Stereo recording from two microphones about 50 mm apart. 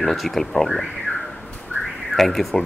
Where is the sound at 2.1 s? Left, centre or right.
Centre.